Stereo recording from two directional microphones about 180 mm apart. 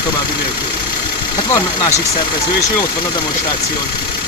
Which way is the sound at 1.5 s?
20° left (ahead or behind).